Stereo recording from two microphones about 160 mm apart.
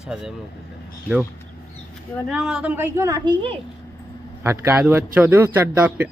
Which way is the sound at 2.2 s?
Centre (ahead or behind).